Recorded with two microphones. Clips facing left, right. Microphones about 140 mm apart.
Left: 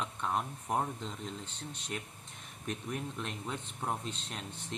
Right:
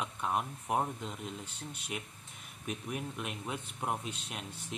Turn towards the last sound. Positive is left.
turn(degrees=-10)  # may be behind; listen again after turning